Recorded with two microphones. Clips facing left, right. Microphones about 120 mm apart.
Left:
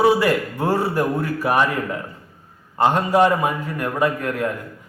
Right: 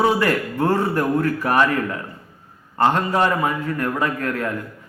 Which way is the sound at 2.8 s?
15° left (ahead or behind).